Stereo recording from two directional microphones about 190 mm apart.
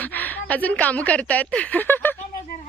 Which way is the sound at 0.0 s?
10° left (ahead or behind).